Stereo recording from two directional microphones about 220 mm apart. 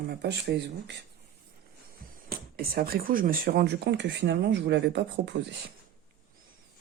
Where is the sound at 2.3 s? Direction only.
45° right (ahead or behind).